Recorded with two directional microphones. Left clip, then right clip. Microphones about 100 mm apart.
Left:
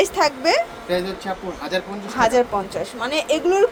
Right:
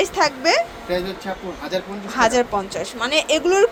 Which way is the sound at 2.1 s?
Centre (ahead or behind).